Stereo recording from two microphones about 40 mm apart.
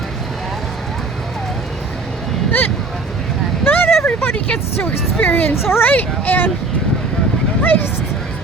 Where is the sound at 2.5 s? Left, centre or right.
Left.